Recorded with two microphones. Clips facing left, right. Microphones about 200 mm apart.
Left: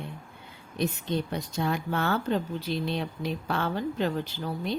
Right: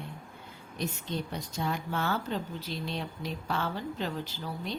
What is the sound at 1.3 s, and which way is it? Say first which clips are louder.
Speech: left 4 dB; 60° left (ahead or behind).